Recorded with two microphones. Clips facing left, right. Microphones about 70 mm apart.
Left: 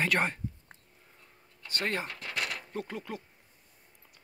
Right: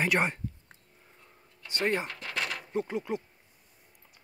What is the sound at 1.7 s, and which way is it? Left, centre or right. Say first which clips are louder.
Speech: right 4 dB; centre.